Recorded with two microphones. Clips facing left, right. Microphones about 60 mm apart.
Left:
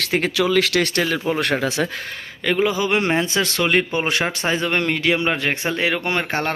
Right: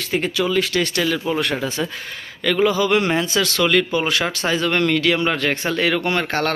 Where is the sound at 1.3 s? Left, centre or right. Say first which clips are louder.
Left 2 dB; left.